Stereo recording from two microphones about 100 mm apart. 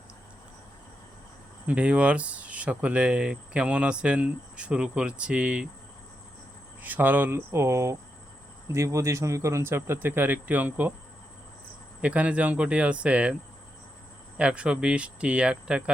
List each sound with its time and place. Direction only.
1.6 s speech: 10° right (ahead or behind)
6.8 s speech: 20° right (ahead or behind)
12.0 s speech: 15° right (ahead or behind)
14.3 s speech: 10° right (ahead or behind)